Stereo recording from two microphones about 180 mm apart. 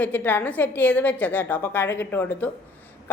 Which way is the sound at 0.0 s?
10° left (ahead or behind).